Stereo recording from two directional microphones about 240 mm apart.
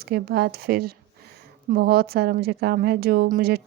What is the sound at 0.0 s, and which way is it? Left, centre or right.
A woman's voice, right.